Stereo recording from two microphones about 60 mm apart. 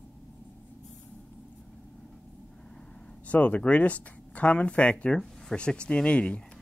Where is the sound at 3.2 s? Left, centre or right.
Left.